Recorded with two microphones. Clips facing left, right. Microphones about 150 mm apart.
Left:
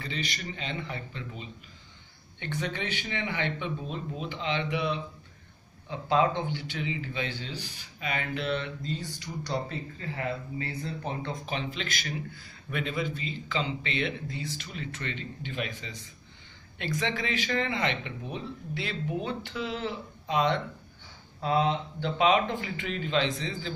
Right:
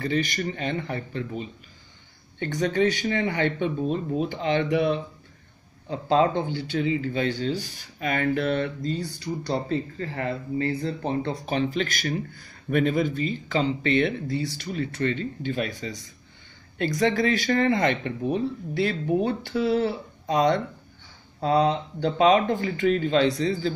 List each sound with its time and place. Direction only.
0.0 s speech: 50° right (ahead or behind)
5.9 s speech: 35° right (ahead or behind)
9.2 s speech: 35° right (ahead or behind)
10.8 s speech: 30° right (ahead or behind)